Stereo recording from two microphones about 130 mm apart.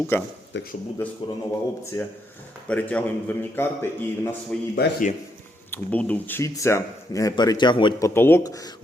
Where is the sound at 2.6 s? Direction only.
10° left (ahead or behind).